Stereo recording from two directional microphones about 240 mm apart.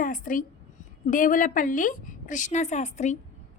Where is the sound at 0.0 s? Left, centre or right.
Left.